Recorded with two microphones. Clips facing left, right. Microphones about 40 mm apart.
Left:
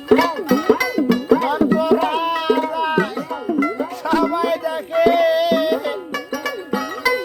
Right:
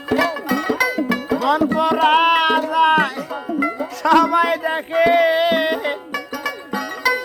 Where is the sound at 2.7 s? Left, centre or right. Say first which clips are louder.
Right 4 dB; right.